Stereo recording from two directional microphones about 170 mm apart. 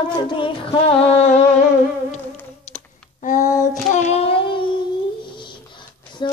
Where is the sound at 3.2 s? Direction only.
50° left (ahead or behind).